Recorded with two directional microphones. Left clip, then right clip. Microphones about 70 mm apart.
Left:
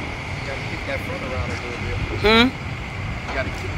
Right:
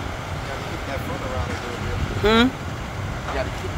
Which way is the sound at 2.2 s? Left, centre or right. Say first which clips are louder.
Left 2 dB; right.